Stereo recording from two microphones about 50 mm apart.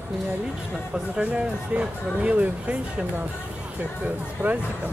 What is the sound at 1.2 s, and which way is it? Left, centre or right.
Speech, right.